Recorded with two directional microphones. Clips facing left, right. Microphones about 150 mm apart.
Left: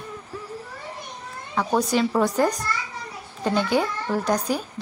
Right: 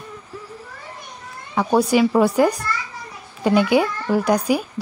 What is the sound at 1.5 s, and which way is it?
A child's voice, 10° right (ahead or behind).